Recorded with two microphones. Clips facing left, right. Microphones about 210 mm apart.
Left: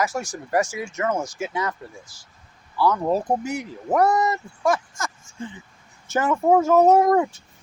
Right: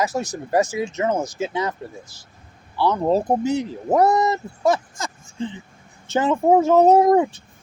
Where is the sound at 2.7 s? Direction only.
20° right (ahead or behind).